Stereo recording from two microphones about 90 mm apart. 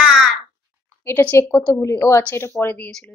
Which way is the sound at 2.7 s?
15° left (ahead or behind).